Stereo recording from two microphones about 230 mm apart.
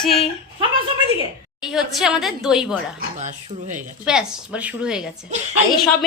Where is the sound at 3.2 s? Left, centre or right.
Right.